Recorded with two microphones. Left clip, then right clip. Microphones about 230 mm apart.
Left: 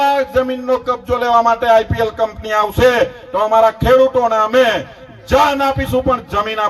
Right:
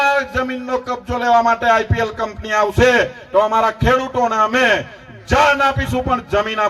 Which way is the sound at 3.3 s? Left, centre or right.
Left.